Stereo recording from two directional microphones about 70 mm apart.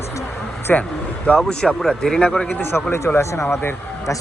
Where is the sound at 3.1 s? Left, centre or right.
Left.